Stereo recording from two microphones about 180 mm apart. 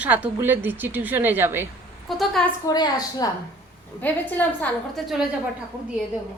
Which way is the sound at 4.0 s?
10° left (ahead or behind).